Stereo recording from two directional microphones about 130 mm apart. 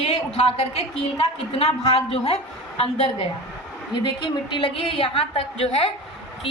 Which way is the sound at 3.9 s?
40° left (ahead or behind).